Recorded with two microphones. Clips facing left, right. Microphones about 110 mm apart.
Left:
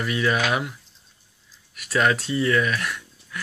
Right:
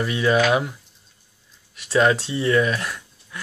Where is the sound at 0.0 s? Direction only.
25° right (ahead or behind).